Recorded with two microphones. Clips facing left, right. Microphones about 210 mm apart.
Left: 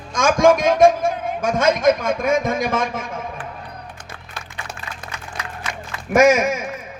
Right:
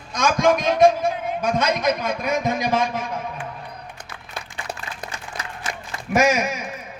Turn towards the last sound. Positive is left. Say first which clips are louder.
# left 5 dB
turn(degrees=50)  # may be behind; listen again after turning